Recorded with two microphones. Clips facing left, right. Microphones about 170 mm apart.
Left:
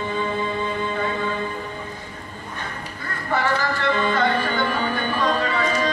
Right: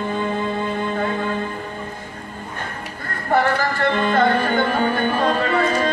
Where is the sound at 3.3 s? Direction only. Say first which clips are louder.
Right 4 dB; 50° right (ahead or behind).